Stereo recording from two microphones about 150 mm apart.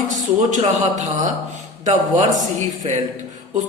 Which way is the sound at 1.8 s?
50° right (ahead or behind).